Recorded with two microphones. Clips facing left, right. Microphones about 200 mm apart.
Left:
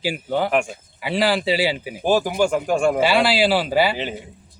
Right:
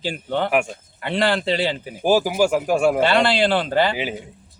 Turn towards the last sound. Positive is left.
turn(degrees=5)  # may be behind; listen again after turning